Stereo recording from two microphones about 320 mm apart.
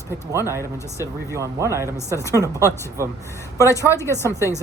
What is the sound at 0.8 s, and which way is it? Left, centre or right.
Speech, centre.